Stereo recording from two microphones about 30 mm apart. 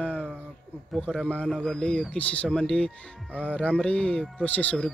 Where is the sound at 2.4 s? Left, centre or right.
Left.